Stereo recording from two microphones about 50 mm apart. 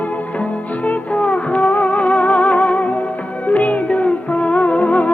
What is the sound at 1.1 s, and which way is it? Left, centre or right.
Music, left.